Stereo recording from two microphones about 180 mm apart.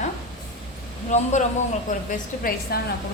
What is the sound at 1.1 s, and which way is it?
Speech, 40° left (ahead or behind).